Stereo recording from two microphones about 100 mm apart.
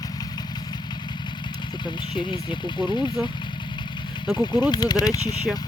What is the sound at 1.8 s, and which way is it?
Speech, 50° left (ahead or behind).